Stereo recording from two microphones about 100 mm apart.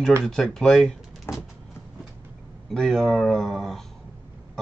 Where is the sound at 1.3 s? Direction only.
25° left (ahead or behind).